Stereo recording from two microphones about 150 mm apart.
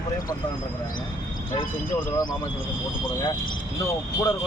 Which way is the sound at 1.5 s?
30° left (ahead or behind).